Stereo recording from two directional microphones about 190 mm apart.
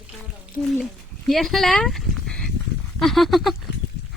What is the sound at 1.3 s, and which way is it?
Speech, centre (ahead or behind).